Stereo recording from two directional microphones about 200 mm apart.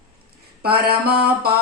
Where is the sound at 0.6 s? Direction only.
50° right (ahead or behind).